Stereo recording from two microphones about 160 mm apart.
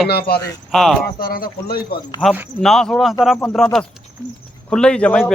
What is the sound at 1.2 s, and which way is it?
Speech, 65° left (ahead or behind).